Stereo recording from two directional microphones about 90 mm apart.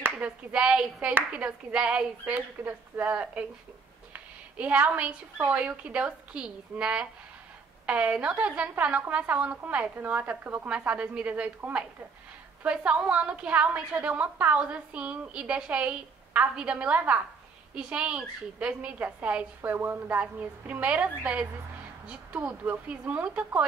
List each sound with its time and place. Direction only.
0.0 s a woman's voice: 15° right (ahead or behind)